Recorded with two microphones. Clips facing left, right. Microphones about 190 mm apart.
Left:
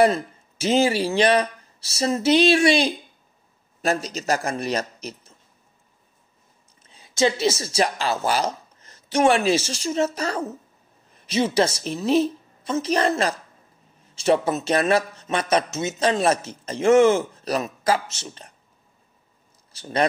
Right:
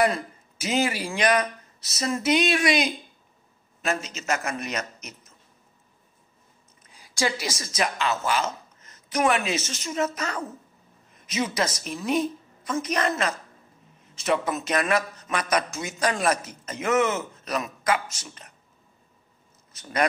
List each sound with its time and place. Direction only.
0.0 s a man's voice: 30° left (ahead or behind)
6.9 s a woman's voice: 25° left (ahead or behind)
19.7 s speech: 30° left (ahead or behind)